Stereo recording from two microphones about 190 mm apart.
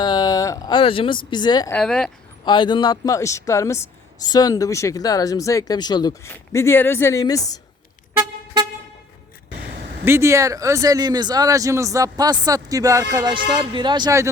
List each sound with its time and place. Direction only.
0.0 s speech: 20° left (ahead or behind)
1.7 s speech: 5° left (ahead or behind)
2.4 s speech: 25° left (ahead or behind)
10.0 s speech: 15° right (ahead or behind)